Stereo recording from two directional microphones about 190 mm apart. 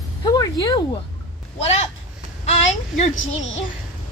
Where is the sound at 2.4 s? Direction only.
35° left (ahead or behind).